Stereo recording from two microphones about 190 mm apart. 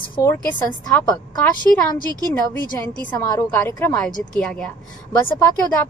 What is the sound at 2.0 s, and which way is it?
Speech, 20° right (ahead or behind).